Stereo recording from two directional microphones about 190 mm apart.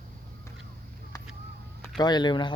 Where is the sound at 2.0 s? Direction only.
20° left (ahead or behind).